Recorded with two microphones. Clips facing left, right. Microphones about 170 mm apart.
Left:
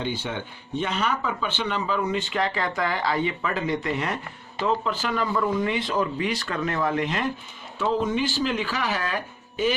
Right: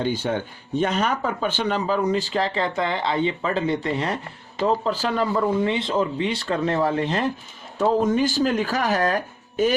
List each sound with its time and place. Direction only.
0.0 s speech: 40° right (ahead or behind)
7.8 s speech: 45° right (ahead or behind)